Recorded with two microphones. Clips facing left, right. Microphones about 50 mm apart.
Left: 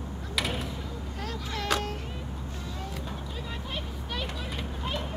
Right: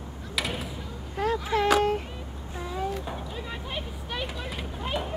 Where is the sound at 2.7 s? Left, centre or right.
Centre.